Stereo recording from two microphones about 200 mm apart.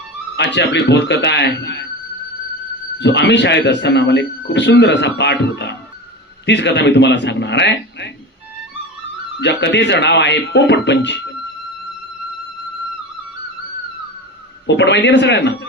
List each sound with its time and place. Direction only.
0.3 s speech: 60° left (ahead or behind)
3.0 s speech: 60° left (ahead or behind)
9.4 s speech: 60° left (ahead or behind)
14.7 s speech: 60° left (ahead or behind)